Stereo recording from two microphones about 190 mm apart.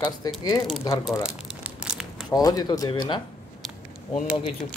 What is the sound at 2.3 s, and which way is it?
Speech, 20° left (ahead or behind).